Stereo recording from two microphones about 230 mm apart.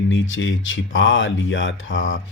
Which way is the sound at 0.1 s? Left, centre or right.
Left.